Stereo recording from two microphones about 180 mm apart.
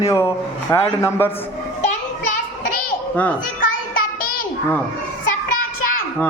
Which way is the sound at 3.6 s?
50° left (ahead or behind).